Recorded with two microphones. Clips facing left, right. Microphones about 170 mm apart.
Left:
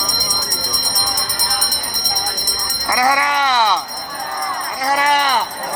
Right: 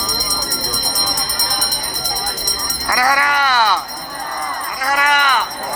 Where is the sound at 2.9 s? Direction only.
20° left (ahead or behind).